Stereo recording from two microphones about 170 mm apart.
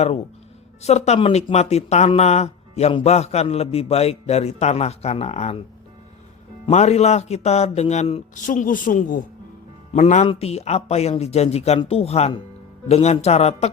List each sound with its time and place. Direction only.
0.8 s speech: 40° left (ahead or behind)
6.7 s speech: 40° left (ahead or behind)
8.4 s speech: 50° left (ahead or behind)
9.9 s speech: 45° left (ahead or behind)